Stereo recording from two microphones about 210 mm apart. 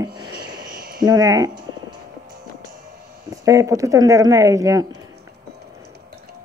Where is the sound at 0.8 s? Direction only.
45° right (ahead or behind).